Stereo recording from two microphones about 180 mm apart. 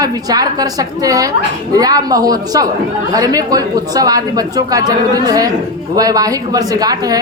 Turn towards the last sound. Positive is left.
turn(degrees=-20)  # may be behind; listen again after turning